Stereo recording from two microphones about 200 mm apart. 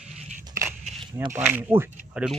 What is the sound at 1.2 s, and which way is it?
Speech, 10° right (ahead or behind).